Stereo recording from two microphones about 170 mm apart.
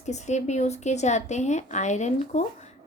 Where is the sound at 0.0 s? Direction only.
45° left (ahead or behind).